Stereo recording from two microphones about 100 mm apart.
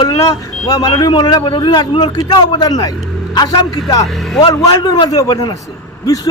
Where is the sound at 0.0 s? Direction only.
40° left (ahead or behind).